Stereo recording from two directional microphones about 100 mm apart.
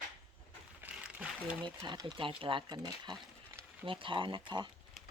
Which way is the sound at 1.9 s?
45° right (ahead or behind).